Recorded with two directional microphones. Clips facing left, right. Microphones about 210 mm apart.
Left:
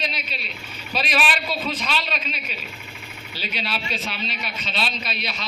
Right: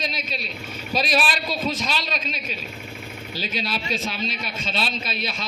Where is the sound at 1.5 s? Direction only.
45° right (ahead or behind).